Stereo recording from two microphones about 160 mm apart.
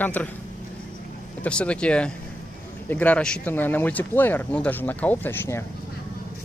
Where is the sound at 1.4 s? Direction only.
5° left (ahead or behind).